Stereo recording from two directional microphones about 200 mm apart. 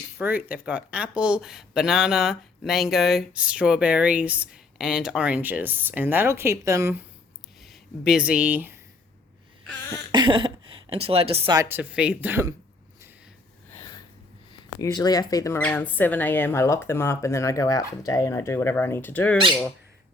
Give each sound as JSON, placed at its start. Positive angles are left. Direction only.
{"t": 0.2, "sound": "speech", "side_deg": -10}
{"t": 7.6, "sound": "speech", "side_deg": 0}
{"t": 10.1, "sound": "speech", "side_deg": -25}
{"t": 11.5, "sound": "speech", "side_deg": -15}
{"t": 13.7, "sound": "snort", "side_deg": 15}
{"t": 14.5, "sound": "speech", "side_deg": 20}